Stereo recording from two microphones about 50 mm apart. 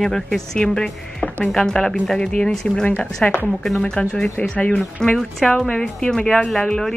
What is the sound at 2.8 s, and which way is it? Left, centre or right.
Speech, left.